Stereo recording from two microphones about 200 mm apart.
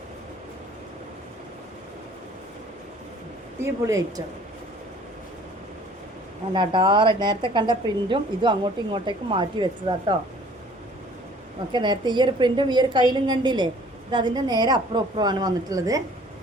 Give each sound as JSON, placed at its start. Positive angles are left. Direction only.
{"t": 3.6, "sound": "a woman's voice", "side_deg": -15}
{"t": 6.5, "sound": "a woman's voice", "side_deg": -25}
{"t": 11.7, "sound": "a woman's voice", "side_deg": -20}